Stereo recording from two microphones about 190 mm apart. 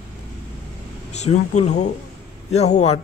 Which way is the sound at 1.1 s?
35° left (ahead or behind).